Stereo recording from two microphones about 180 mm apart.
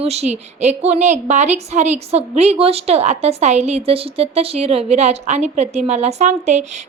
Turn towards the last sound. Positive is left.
turn(degrees=-40)  # may be behind; listen again after turning